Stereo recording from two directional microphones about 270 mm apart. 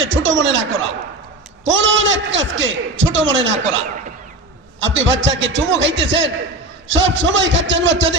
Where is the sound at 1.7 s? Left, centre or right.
Right.